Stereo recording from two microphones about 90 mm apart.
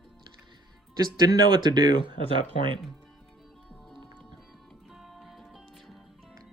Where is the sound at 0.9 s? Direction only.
45° right (ahead or behind).